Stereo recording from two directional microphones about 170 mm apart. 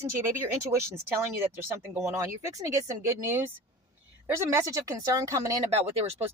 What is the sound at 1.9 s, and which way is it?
Speech, 15° right (ahead or behind).